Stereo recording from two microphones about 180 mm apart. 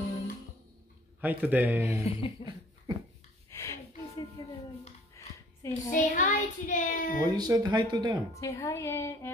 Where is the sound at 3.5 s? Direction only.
15° left (ahead or behind).